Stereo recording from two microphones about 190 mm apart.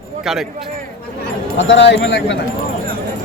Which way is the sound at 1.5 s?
70° left (ahead or behind).